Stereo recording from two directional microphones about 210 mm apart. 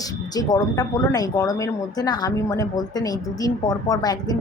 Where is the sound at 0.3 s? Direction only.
20° left (ahead or behind).